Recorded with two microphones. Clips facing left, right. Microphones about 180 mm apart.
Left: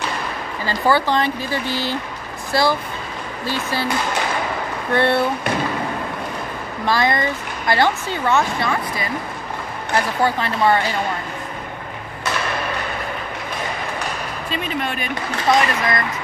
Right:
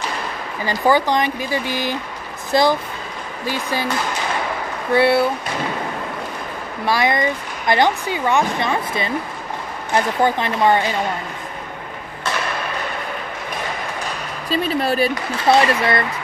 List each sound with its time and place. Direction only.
0.7 s speech: 15° right (ahead or behind)
4.9 s speech: 10° right (ahead or behind)
6.9 s speech: 15° right (ahead or behind)
14.5 s speech: 35° right (ahead or behind)